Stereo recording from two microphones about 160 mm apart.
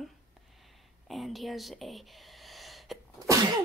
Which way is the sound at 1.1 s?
Centre (ahead or behind).